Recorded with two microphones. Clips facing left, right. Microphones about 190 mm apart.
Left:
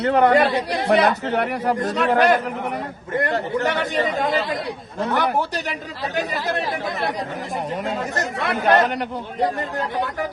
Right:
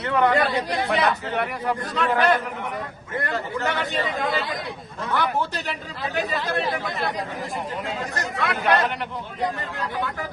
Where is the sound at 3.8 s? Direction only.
45° left (ahead or behind).